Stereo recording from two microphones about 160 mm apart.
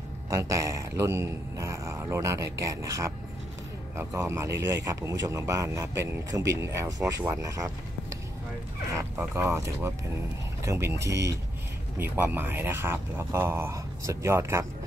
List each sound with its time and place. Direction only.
0.4 s a man's voice: 20° right (ahead or behind)
8.9 s a man's voice: 10° right (ahead or behind)